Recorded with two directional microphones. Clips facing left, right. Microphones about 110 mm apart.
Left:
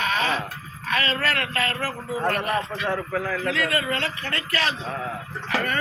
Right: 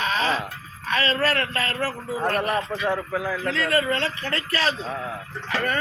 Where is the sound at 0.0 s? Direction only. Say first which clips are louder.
Right 1 dB; 30° right (ahead or behind).